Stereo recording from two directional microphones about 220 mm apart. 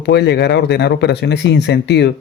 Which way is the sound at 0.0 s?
50° left (ahead or behind).